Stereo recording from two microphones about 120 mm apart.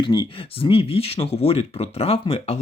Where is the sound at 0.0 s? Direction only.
40° left (ahead or behind).